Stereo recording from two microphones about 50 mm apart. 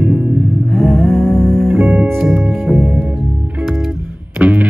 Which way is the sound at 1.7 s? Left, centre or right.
Right.